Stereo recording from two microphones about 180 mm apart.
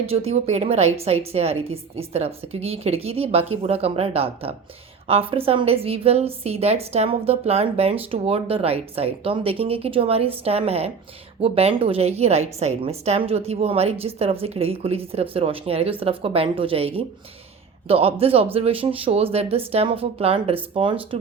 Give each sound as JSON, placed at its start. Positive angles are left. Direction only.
{"t": 0.0, "sound": "a woman's voice", "side_deg": -35}